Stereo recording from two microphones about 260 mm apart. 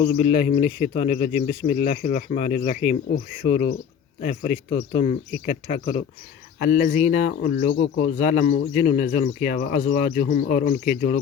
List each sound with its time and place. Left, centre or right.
0.1 s speech: left
7.7 s speech: left
8.0 s speech: left